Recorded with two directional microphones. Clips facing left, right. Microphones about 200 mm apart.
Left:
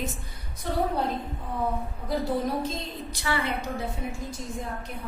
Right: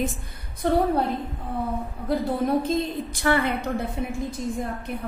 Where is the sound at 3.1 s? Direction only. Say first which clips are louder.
Right 6 dB; 50° right (ahead or behind).